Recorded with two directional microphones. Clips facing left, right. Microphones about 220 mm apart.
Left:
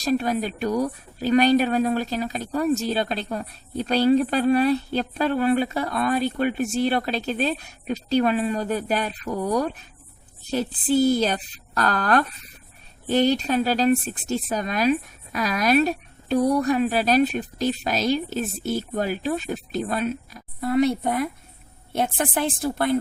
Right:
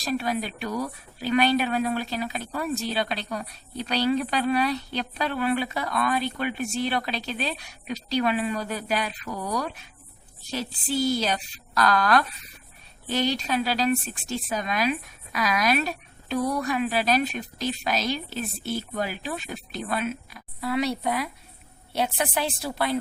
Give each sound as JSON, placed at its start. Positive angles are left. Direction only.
{"t": 0.0, "sound": "a woman's voice", "side_deg": 45}